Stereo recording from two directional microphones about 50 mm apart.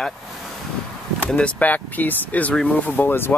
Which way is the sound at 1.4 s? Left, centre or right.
Left.